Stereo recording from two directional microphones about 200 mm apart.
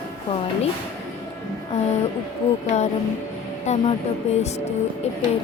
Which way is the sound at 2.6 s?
35° left (ahead or behind).